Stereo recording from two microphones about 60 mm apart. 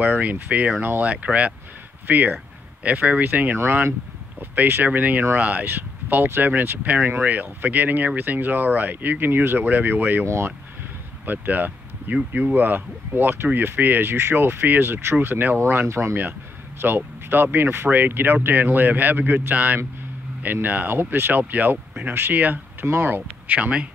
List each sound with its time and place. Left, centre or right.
0.0 s speech: right
10.2 s speech: right
11.2 s speech: right